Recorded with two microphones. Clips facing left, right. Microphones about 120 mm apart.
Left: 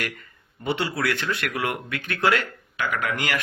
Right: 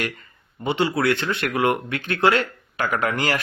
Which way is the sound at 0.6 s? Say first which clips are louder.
Right 4 dB; 20° right (ahead or behind).